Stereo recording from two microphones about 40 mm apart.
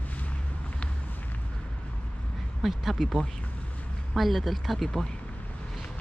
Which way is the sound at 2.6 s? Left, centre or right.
Centre.